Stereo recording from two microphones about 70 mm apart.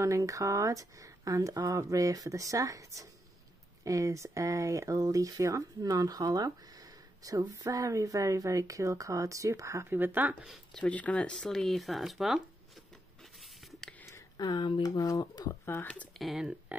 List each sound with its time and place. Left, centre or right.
0.0 s speech: right
9.9 s speech: right
10.4 s speech: centre
10.8 s speech: centre
13.7 s a sound: centre
14.3 s speech: left
15.6 s speech: left
16.2 s speech: centre